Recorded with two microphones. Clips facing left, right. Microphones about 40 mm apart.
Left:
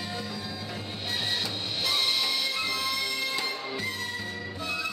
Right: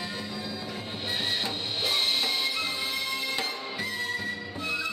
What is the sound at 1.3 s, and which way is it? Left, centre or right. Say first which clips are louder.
Music: right 1 dB; right.